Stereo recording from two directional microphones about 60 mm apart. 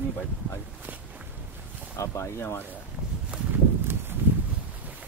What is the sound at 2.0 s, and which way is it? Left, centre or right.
Speech, left.